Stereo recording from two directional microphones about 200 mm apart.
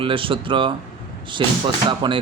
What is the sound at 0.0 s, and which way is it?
Speech, 25° right (ahead or behind).